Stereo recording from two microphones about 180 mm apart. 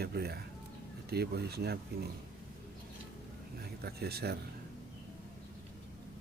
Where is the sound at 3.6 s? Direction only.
60° right (ahead or behind).